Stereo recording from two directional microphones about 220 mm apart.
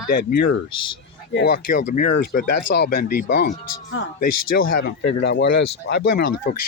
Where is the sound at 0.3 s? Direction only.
45° left (ahead or behind).